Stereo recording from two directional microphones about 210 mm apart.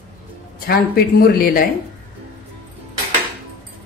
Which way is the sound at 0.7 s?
45° left (ahead or behind).